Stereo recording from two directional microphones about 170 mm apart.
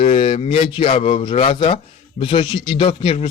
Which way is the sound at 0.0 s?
35° left (ahead or behind).